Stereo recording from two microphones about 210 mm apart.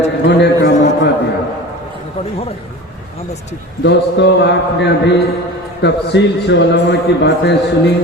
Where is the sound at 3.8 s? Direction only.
55° left (ahead or behind).